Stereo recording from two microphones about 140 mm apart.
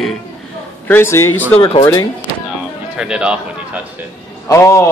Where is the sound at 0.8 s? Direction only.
15° left (ahead or behind).